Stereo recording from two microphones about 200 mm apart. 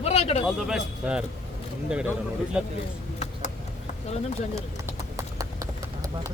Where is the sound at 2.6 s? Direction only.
5° right (ahead or behind).